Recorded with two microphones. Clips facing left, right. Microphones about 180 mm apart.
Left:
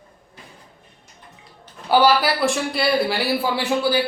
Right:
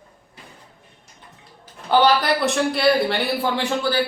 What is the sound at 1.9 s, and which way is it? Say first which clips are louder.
Speech: even; 5° left (ahead or behind).